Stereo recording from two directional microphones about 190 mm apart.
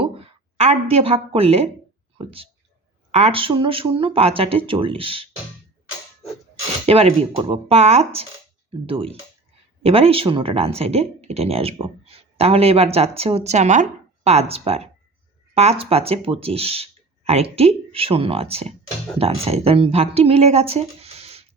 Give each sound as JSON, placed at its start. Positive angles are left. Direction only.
{"t": 0.0, "sound": "a woman's voice", "side_deg": -30}
{"t": 6.8, "sound": "speech", "side_deg": -30}